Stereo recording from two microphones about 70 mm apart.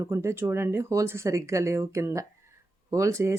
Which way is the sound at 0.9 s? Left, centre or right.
Right.